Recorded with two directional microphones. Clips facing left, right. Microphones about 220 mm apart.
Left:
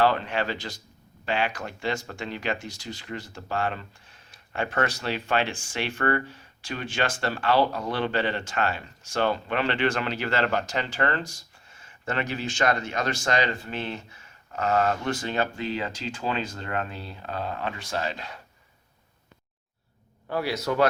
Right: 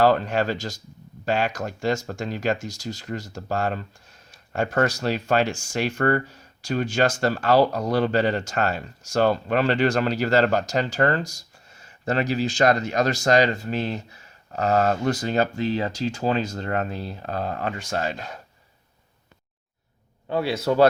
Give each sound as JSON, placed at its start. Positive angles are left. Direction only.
{"t": 0.0, "sound": "speech", "side_deg": -40}
{"t": 20.3, "sound": "speech", "side_deg": -25}